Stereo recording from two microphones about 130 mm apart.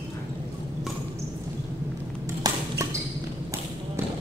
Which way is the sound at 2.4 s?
25° right (ahead or behind).